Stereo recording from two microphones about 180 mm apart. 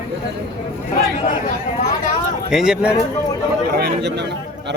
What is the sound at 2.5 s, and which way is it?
Speech, 5° right (ahead or behind).